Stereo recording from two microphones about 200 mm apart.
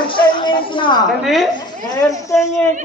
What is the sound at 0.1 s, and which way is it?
Music, 25° left (ahead or behind).